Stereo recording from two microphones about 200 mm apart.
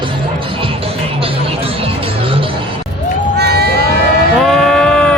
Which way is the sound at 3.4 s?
55° right (ahead or behind).